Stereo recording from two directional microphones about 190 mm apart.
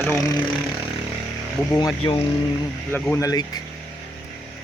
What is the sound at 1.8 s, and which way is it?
Speech, 20° left (ahead or behind).